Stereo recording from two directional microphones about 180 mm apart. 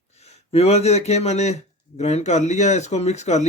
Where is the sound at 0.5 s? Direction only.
35° left (ahead or behind).